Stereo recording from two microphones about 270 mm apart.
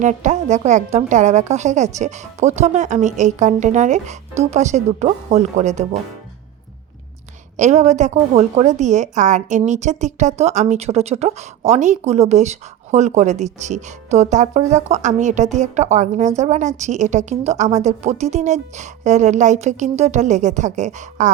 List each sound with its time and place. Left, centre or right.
0.0 s a woman's voice: right
7.5 s a woman's voice: right